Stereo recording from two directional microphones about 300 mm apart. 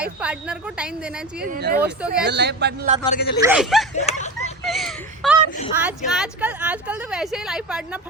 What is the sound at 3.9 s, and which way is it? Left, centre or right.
Speech, left.